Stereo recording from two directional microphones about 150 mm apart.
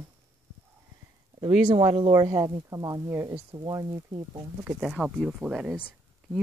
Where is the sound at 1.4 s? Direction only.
35° right (ahead or behind).